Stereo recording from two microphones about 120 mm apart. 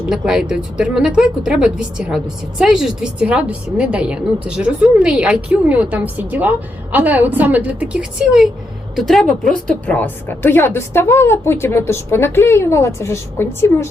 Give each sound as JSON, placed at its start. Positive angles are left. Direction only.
{"t": 0.1, "sound": "a woman's voice", "side_deg": -5}